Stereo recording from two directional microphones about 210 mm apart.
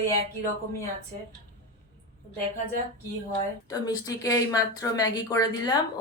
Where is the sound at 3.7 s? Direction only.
15° left (ahead or behind).